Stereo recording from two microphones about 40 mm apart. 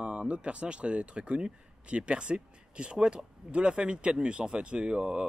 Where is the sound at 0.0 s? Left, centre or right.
Right.